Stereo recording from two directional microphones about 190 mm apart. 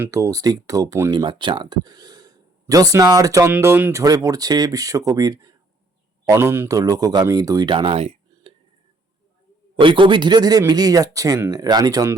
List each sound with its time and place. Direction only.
0.0 s speech: 15° right (ahead or behind); by 8.5 s 30° right (ahead or behind)
9.8 s speech: 25° right (ahead or behind)